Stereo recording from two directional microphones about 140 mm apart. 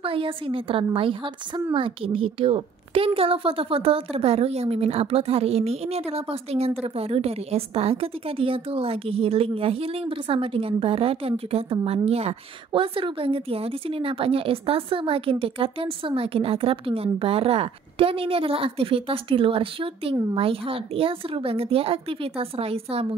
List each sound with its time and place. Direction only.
0.0 s a woman's voice: 40° right (ahead or behind)